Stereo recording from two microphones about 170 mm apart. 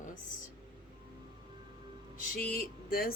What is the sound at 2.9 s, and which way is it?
Speech, 60° left (ahead or behind).